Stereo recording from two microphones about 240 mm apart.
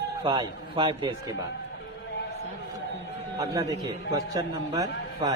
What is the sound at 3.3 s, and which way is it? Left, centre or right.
A man's voice, centre.